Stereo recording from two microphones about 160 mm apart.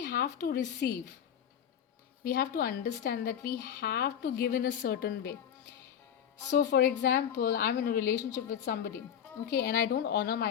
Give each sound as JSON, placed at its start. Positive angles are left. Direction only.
{"t": 0.0, "sound": "a woman's voice", "side_deg": 80}
{"t": 2.2, "sound": "a woman's voice", "side_deg": 65}
{"t": 3.6, "sound": "a woman's voice", "side_deg": 80}
{"t": 6.5, "sound": "a woman's voice", "side_deg": 90}
{"t": 7.0, "sound": "a woman's voice", "side_deg": 65}